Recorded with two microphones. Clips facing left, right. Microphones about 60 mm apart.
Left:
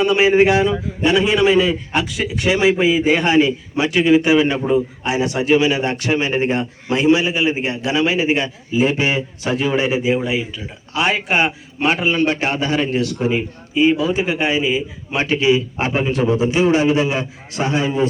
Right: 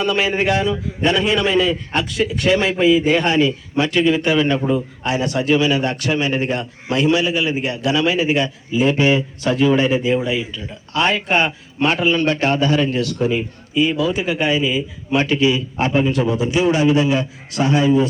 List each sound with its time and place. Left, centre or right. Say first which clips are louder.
0.0 s a man's voice: left 5 dB; left